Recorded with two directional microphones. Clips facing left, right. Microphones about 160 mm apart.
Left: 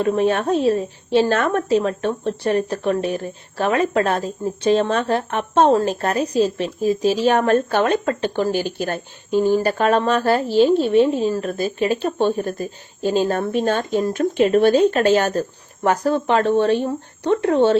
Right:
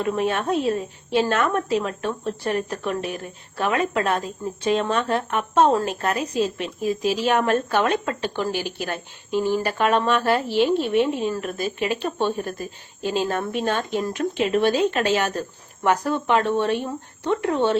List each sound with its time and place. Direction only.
0.0 s speech: 30° left (ahead or behind)